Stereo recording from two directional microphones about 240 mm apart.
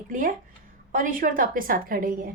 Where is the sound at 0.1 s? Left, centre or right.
Right.